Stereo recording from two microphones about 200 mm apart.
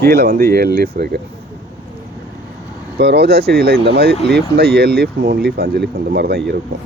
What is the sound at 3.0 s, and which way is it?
Speech, 55° right (ahead or behind).